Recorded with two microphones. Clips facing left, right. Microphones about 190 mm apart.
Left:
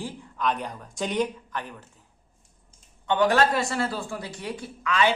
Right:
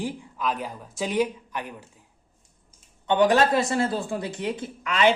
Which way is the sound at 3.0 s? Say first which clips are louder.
Right 2 dB; 20° right (ahead or behind).